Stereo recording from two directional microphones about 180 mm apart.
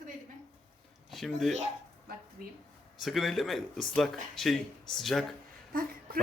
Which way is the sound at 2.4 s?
55° right (ahead or behind).